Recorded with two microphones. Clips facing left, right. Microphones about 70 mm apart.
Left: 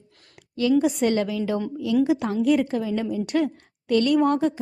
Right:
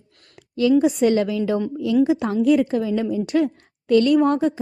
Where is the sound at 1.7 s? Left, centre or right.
Right.